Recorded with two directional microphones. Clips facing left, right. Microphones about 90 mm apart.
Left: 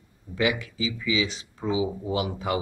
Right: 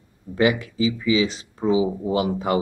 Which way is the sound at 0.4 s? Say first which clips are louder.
Right 6 dB; 35° right (ahead or behind).